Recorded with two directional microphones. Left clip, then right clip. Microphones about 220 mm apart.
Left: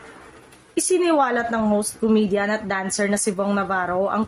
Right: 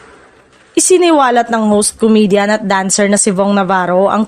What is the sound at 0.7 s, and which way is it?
A woman's voice, 45° right (ahead or behind).